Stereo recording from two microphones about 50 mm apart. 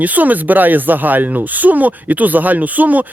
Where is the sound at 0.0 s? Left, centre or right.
Right.